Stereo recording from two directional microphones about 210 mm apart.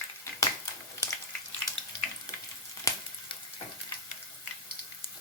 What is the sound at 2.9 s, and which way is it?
Frying, 15° left (ahead or behind).